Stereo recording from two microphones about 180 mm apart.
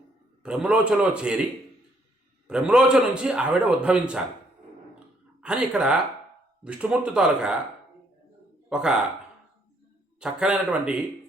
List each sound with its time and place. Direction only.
0.4 s a man's voice: 5° right (ahead or behind)
2.5 s a man's voice: 5° right (ahead or behind)
5.4 s a man's voice: 5° right (ahead or behind)
8.7 s a man's voice: 5° right (ahead or behind)
10.2 s a man's voice: 5° right (ahead or behind)